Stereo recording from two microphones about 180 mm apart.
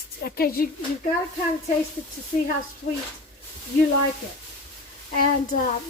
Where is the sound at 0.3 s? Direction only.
55° left (ahead or behind).